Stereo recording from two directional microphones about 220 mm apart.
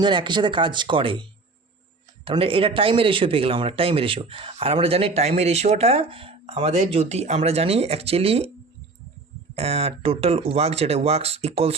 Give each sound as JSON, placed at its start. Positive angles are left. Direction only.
{"t": 0.0, "sound": "a man's voice", "side_deg": -20}
{"t": 9.6, "sound": "a man's voice", "side_deg": -25}